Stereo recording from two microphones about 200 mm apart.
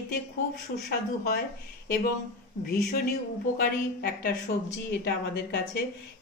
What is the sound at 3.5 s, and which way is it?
A woman's voice, 50° left (ahead or behind).